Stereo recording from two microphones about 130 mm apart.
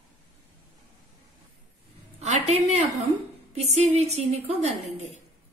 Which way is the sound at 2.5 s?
55° right (ahead or behind).